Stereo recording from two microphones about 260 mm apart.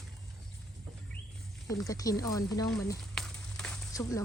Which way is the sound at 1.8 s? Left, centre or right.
Centre.